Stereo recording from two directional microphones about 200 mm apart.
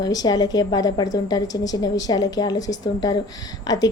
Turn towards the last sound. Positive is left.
turn(degrees=20)  # may be behind; listen again after turning